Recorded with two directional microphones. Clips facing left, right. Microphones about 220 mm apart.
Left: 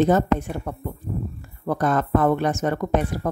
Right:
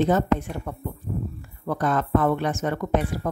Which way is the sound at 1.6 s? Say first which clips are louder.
Left 2 dB; 40° left (ahead or behind).